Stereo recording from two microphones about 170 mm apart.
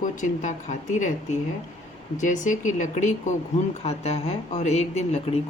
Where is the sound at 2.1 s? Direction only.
45° left (ahead or behind).